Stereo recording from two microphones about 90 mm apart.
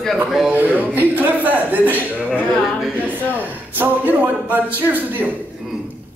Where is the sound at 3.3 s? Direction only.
20° right (ahead or behind).